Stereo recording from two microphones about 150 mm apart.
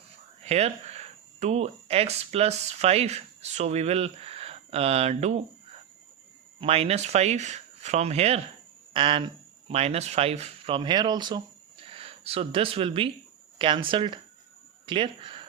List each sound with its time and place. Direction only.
0.4 s speech: 45° right (ahead or behind)
6.6 s speech: 40° right (ahead or behind)